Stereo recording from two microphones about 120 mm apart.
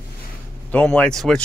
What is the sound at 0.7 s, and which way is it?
Speech, 10° left (ahead or behind).